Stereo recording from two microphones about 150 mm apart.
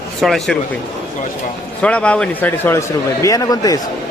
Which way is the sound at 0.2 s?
Centre (ahead or behind).